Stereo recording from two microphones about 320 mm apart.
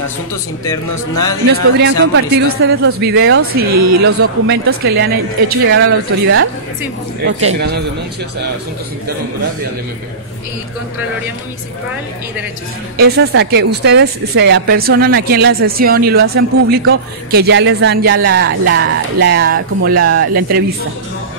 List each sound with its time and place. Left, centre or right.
0.7 s speech: centre
1.8 s a woman's voice: right
7.3 s speech: right
12.9 s a woman's voice: right